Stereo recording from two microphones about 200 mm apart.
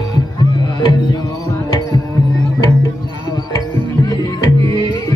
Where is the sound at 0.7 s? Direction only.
20° left (ahead or behind).